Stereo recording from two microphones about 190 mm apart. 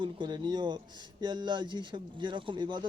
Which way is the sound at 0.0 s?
25° right (ahead or behind).